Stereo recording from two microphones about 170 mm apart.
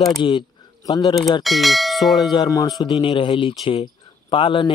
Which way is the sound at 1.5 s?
Centre (ahead or behind).